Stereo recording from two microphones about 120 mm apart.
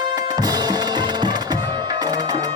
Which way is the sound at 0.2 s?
30° right (ahead or behind).